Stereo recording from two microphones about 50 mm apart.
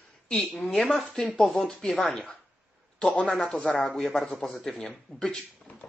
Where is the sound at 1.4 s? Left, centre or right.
Centre.